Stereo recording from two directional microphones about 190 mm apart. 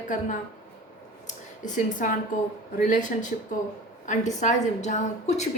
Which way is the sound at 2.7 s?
40° left (ahead or behind).